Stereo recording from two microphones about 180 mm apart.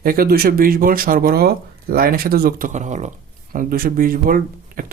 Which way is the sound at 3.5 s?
55° right (ahead or behind).